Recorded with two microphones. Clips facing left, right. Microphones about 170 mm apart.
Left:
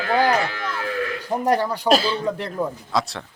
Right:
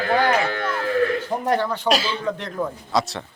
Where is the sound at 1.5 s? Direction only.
10° left (ahead or behind).